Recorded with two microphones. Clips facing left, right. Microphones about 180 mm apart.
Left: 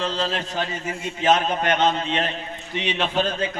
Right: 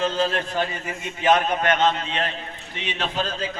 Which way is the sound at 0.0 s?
55° right (ahead or behind).